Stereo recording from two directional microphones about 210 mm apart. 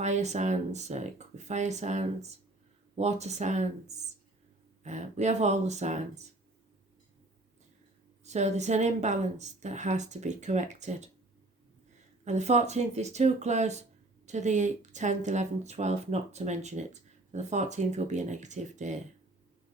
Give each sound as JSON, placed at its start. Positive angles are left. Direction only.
{"t": 0.0, "sound": "speech", "side_deg": -35}
{"t": 8.2, "sound": "speech", "side_deg": -35}
{"t": 12.2, "sound": "speech", "side_deg": -35}